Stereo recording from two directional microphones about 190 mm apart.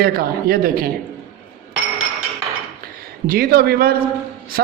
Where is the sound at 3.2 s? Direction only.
50° right (ahead or behind).